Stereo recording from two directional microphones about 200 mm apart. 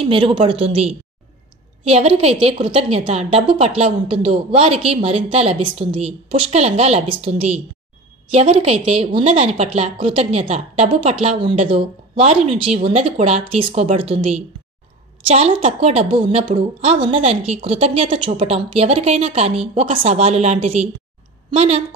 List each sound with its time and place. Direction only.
0.0 s a woman's voice: 25° right (ahead or behind)